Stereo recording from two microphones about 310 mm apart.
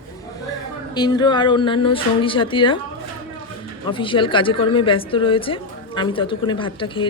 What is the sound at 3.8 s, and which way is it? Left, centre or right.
A woman's voice, centre.